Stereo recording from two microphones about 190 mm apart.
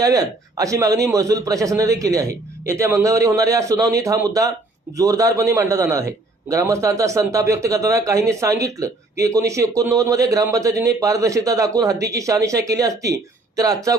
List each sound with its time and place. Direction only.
0.0 s a man's voice: 20° right (ahead or behind)